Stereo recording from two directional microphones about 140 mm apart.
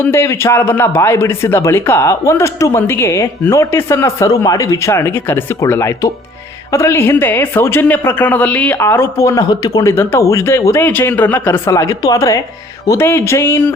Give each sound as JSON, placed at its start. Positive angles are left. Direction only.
{"t": 0.0, "sound": "a woman's voice", "side_deg": 20}